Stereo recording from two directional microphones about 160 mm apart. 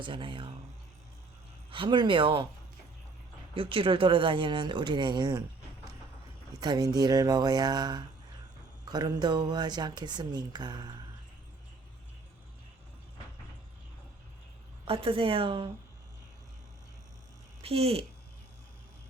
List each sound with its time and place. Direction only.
0.0 s speech: 30° right (ahead or behind)
1.7 s speech: 30° right (ahead or behind)
3.5 s speech: 35° right (ahead or behind)
6.6 s speech: 25° right (ahead or behind)
14.8 s speech: 35° right (ahead or behind)
17.6 s a child's voice: 40° right (ahead or behind)